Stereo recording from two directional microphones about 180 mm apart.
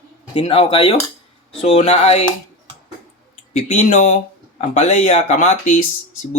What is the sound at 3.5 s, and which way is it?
Speech, 45° left (ahead or behind).